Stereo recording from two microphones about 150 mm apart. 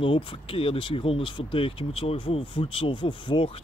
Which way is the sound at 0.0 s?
35° left (ahead or behind).